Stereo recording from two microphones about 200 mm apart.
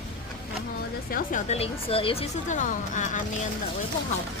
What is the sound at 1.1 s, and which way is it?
A woman's voice, 35° left (ahead or behind).